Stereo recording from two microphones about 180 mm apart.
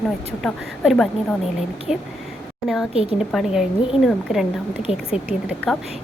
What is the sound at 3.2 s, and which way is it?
A woman's voice, 5° right (ahead or behind).